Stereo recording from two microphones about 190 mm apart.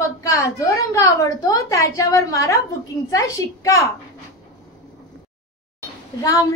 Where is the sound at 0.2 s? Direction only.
15° left (ahead or behind).